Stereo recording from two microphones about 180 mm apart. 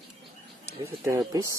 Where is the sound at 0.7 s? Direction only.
15° right (ahead or behind).